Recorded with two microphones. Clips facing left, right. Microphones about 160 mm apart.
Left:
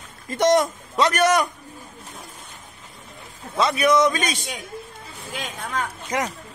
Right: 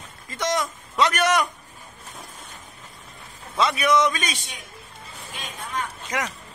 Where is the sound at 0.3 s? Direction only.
55° left (ahead or behind).